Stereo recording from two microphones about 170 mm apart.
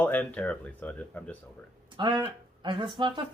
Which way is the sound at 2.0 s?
25° right (ahead or behind).